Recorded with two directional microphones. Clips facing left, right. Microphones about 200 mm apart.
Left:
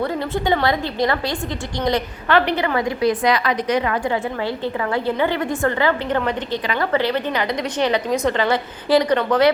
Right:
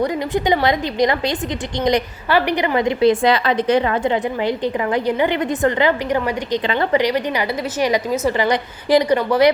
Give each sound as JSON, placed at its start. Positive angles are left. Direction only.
{"t": 0.0, "sound": "a woman's voice", "side_deg": -15}